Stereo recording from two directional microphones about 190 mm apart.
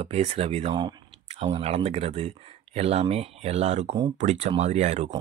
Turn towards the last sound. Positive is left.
turn(degrees=-35)  # may be behind; listen again after turning